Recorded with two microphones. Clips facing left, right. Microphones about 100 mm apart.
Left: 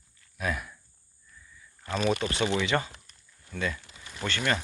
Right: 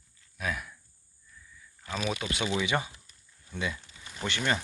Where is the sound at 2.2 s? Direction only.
Centre (ahead or behind).